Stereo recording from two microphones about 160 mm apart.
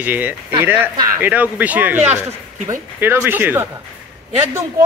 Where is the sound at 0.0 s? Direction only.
10° right (ahead or behind).